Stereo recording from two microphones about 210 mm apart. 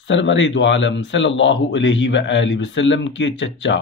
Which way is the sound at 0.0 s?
60° left (ahead or behind).